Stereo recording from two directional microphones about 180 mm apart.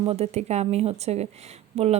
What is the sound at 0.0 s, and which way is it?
A woman's voice, 35° right (ahead or behind).